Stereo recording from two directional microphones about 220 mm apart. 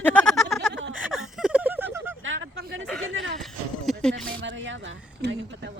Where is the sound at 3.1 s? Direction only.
60° right (ahead or behind).